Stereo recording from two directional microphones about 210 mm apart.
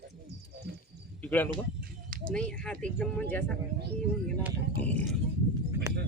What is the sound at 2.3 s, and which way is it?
Speech, 5° left (ahead or behind).